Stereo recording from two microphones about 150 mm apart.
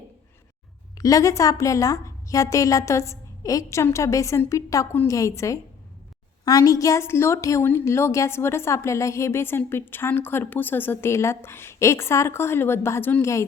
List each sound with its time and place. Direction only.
0.9 s a woman's voice: 25° left (ahead or behind)